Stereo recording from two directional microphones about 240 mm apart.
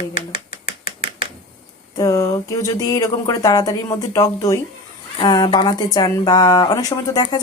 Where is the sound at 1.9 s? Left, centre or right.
Centre.